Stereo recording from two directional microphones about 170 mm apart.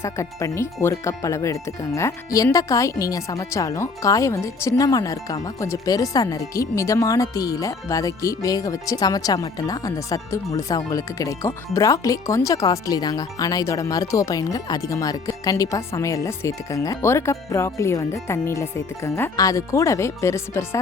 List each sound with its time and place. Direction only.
0.0 s speech: 20° left (ahead or behind)